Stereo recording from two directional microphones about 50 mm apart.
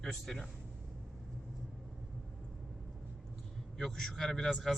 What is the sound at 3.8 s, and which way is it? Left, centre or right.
Speech, centre.